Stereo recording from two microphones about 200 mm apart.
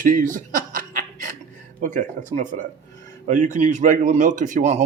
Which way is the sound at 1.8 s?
40° right (ahead or behind).